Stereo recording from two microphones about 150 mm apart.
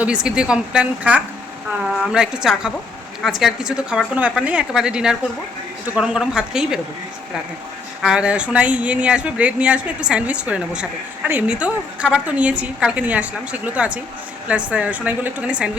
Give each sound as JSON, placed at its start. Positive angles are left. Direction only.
{"t": 0.0, "sound": "a woman's voice", "side_deg": -5}
{"t": 8.0, "sound": "speech", "side_deg": -5}